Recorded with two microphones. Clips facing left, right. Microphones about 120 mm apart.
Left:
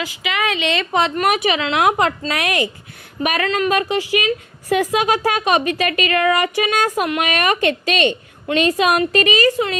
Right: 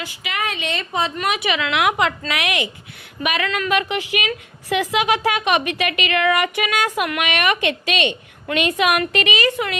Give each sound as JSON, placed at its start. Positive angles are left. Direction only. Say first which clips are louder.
{"t": 0.2, "sound": "a woman's voice", "louder": "left 4 dB", "side_deg": 90}
{"t": 1.1, "sound": "a woman's voice", "louder": "left 4 dB", "side_deg": 50}